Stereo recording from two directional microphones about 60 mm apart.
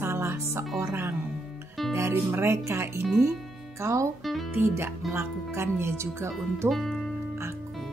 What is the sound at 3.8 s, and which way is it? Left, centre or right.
Speech, right.